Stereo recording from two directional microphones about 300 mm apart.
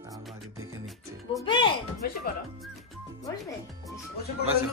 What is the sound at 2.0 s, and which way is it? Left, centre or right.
Music, left.